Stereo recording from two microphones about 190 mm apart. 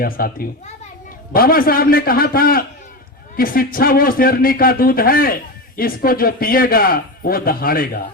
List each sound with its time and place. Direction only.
0.0 s a man's voice: 50° left (ahead or behind)